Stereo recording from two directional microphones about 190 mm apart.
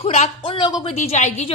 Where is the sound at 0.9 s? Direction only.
35° left (ahead or behind).